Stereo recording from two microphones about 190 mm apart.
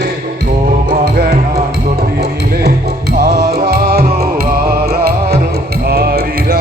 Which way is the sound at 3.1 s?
50° right (ahead or behind).